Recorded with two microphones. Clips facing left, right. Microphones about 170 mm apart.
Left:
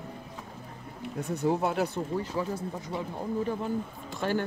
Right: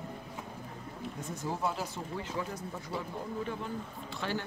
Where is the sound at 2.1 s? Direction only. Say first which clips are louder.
Left 7 dB; 45° left (ahead or behind).